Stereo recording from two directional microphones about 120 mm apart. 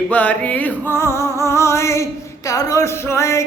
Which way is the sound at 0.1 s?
15° left (ahead or behind).